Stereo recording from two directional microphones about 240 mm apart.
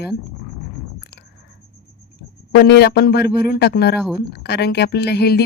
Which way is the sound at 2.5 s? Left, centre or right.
Left.